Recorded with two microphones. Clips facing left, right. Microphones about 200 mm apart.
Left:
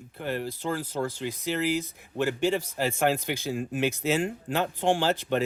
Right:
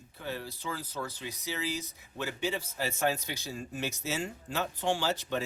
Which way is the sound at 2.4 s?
50° left (ahead or behind).